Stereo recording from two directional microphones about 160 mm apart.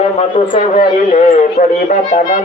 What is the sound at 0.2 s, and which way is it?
Speech, 40° left (ahead or behind).